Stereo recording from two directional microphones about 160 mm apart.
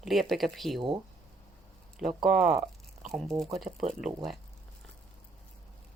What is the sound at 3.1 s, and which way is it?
Speech, centre (ahead or behind).